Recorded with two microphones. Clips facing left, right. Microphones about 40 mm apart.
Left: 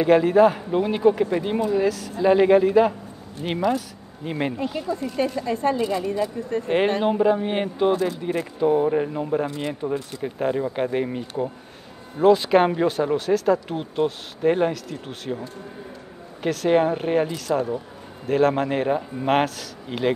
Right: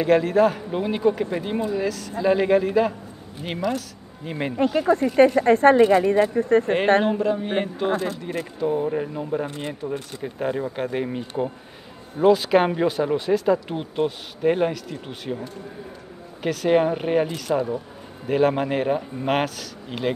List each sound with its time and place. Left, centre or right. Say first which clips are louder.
0.0 s speech: left 2 dB; centre
4.7 s speech: right 8 dB; right
7.1 s speech: left 3 dB; centre
7.9 s speech: left 2 dB; right
8.5 s speech: left 4 dB; centre
10.2 s speech: left 2 dB; centre
16.4 s speech: even; centre
18.2 s a man's voice: left 1 dB; centre